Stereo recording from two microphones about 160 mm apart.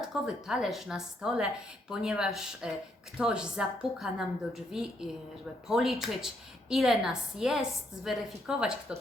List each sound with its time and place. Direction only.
0.0 s a woman's voice: centre (ahead or behind)